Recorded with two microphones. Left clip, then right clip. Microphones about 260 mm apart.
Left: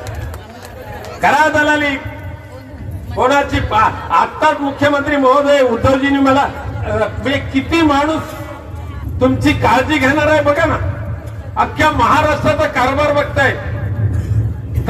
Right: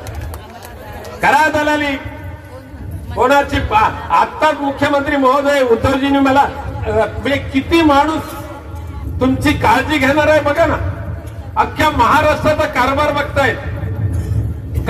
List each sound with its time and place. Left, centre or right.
1.2 s a sound: right
3.2 s a man's voice: right
9.2 s a man's voice: right